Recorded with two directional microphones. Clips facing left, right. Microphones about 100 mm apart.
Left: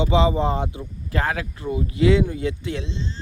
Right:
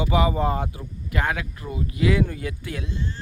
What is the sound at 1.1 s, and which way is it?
Speech, 30° left (ahead or behind).